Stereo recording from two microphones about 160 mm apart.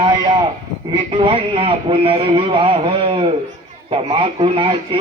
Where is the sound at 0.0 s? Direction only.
25° right (ahead or behind).